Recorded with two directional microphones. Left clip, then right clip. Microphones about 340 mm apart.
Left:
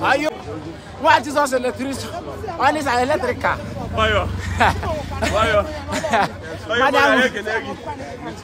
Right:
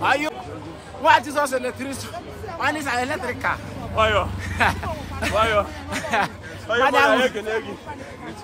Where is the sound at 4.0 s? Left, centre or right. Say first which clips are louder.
Left 1 dB; centre.